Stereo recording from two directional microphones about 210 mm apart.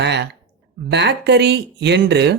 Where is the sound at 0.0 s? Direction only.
55° right (ahead or behind).